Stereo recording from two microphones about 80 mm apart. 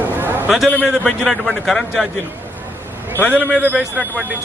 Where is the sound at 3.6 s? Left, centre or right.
Centre.